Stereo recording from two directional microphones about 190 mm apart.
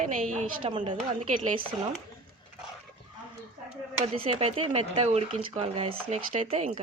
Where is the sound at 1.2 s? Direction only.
40° right (ahead or behind).